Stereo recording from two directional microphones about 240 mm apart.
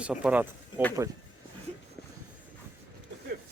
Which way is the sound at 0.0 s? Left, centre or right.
Centre.